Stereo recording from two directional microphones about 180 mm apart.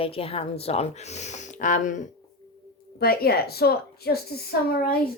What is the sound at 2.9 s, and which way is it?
A woman's voice, 60° left (ahead or behind).